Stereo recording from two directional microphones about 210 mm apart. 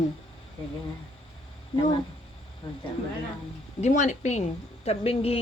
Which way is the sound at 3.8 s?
35° left (ahead or behind).